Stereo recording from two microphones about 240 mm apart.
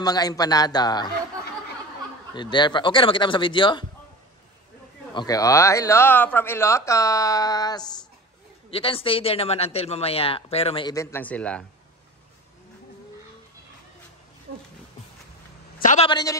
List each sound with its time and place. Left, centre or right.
0.0 s speech: centre
2.3 s a man's voice: centre
5.1 s a man's voice: centre
15.8 s a man's voice: left
16.1 s speech: centre